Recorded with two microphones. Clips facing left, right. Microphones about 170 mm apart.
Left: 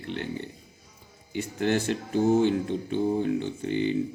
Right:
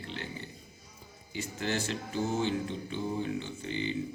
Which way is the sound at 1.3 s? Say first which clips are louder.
Left 8 dB; 55° left (ahead or behind).